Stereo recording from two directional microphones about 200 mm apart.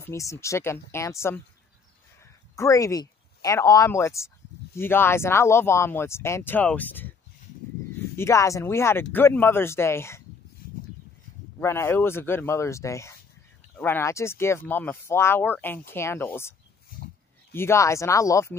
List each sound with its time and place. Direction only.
0.0 s speech: 15° left (ahead or behind)
2.5 s speech: 15° left (ahead or behind)
8.2 s speech: 15° left (ahead or behind)
11.6 s speech: 10° left (ahead or behind)